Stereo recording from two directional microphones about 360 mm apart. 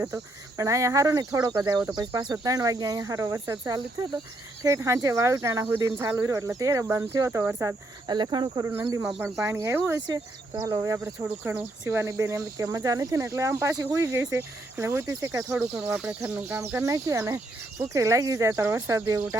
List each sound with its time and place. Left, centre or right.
0.0 s speech: centre